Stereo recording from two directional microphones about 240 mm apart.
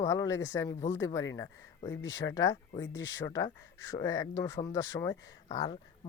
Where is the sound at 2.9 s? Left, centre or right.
Left.